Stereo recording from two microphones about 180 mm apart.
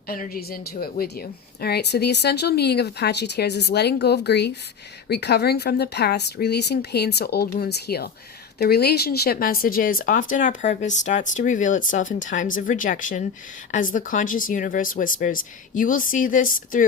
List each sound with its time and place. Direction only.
0.1 s a woman's voice: 55° left (ahead or behind)